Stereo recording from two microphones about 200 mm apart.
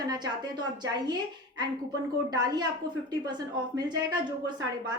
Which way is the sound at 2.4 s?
20° right (ahead or behind).